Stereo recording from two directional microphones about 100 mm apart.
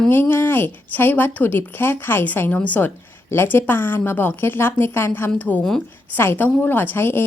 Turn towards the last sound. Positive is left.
turn(degrees=20)  # may be behind; listen again after turning